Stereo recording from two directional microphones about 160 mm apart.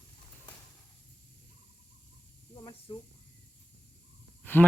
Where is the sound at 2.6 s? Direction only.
30° left (ahead or behind).